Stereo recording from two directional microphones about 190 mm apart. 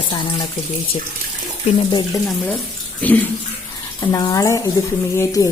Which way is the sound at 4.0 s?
20° left (ahead or behind).